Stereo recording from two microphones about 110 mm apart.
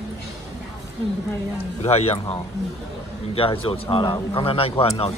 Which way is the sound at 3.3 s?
55° left (ahead or behind).